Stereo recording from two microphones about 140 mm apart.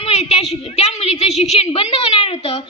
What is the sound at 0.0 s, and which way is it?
A woman's voice, 50° left (ahead or behind).